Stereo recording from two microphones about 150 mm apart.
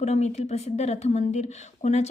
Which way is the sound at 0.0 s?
50° left (ahead or behind).